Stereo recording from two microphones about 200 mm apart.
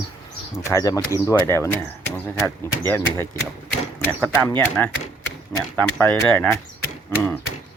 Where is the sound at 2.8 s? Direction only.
10° left (ahead or behind).